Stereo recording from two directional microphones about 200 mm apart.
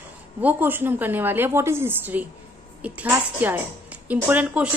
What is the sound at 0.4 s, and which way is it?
Speech, 10° right (ahead or behind).